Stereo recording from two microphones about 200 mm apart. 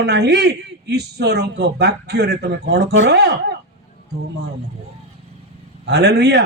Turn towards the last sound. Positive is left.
turn(degrees=-55)  # may be behind; listen again after turning